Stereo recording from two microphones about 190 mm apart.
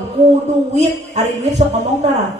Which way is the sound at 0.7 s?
35° right (ahead or behind).